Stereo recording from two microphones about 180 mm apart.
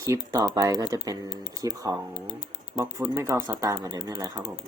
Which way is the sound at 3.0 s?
15° right (ahead or behind).